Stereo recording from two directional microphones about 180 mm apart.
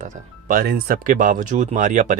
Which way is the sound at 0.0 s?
45° right (ahead or behind).